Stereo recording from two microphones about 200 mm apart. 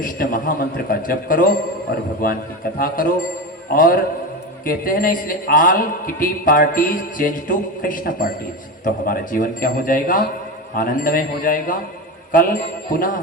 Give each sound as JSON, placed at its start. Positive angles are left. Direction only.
{"t": 0.0, "sound": "a man's voice", "side_deg": 45}